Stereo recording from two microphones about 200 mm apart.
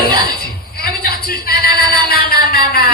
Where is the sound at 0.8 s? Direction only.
50° left (ahead or behind).